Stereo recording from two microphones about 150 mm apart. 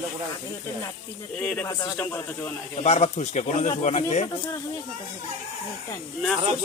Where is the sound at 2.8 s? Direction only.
45° left (ahead or behind).